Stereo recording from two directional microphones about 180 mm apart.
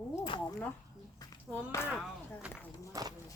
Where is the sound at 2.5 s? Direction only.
15° left (ahead or behind).